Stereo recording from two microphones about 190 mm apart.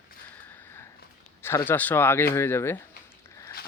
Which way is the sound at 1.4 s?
10° left (ahead or behind).